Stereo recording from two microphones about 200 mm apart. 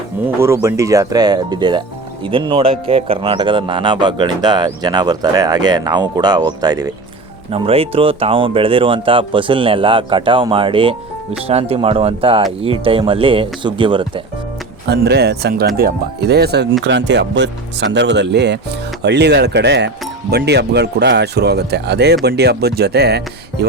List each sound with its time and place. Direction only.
0.3 s a man's voice: 15° right (ahead or behind)
7.5 s a man's voice: 30° right (ahead or behind)
14.8 s speech: 55° right (ahead or behind)